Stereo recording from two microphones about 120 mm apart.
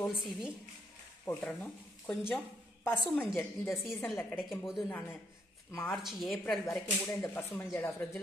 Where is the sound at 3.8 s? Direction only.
20° left (ahead or behind).